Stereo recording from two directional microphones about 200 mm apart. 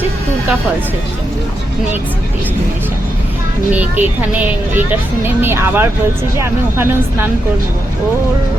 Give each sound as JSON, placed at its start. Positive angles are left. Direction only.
{"t": 3.7, "sound": "speech", "side_deg": -10}